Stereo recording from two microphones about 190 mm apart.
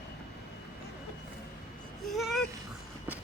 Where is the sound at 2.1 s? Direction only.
Centre (ahead or behind).